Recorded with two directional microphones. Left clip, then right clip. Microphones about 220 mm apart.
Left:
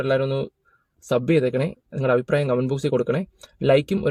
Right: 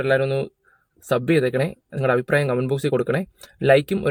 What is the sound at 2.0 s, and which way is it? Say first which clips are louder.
Speech: even; 15° right (ahead or behind).